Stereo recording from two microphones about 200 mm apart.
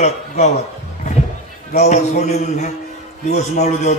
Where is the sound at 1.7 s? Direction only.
35° left (ahead or behind).